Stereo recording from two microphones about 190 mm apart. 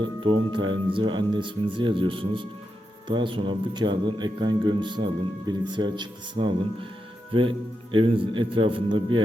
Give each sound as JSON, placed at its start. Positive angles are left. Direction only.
{"t": 0.0, "sound": "speech", "side_deg": -25}
{"t": 6.4, "sound": "speech", "side_deg": -35}
{"t": 7.9, "sound": "speech", "side_deg": -25}